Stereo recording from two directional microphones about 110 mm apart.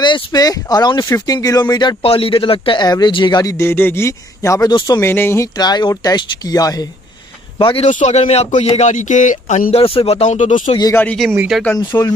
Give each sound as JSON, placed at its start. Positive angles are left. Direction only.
{"t": 0.0, "sound": "speech", "side_deg": 40}
{"t": 2.0, "sound": "speech", "side_deg": 55}
{"t": 2.8, "sound": "speech", "side_deg": 40}
{"t": 3.5, "sound": "speech", "side_deg": 20}
{"t": 5.0, "sound": "speech", "side_deg": 20}
{"t": 5.6, "sound": "speech", "side_deg": 40}
{"t": 7.5, "sound": "a man's voice", "side_deg": 50}
{"t": 7.8, "sound": "a man's voice", "side_deg": 90}
{"t": 10.8, "sound": "speech", "side_deg": 25}
{"t": 11.5, "sound": "speech", "side_deg": 0}
{"t": 11.9, "sound": "speech", "side_deg": 25}